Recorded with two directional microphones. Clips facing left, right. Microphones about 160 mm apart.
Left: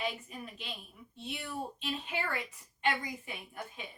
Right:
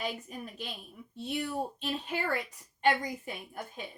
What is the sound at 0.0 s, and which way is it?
A woman's voice, 45° right (ahead or behind).